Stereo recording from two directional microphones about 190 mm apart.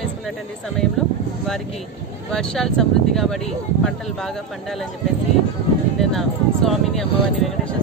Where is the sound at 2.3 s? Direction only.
5° left (ahead or behind).